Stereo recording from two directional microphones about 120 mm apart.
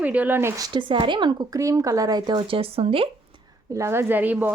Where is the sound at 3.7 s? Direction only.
20° right (ahead or behind).